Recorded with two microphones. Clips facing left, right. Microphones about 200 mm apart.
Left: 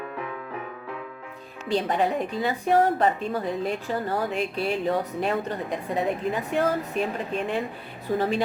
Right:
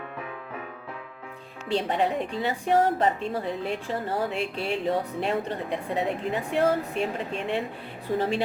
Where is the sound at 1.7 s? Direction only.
30° right (ahead or behind).